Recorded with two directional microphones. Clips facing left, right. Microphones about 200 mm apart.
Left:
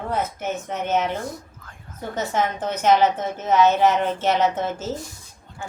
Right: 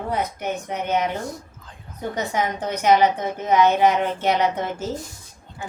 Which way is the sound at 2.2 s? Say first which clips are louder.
Left 1 dB; 10° right (ahead or behind).